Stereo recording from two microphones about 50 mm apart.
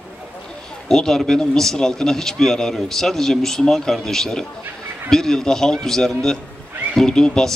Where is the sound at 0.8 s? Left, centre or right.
Centre.